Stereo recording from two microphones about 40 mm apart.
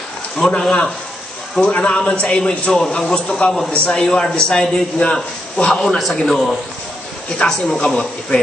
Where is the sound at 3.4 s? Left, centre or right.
Left.